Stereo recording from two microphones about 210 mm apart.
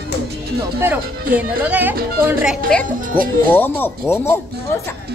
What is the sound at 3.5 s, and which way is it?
Speech, 10° left (ahead or behind).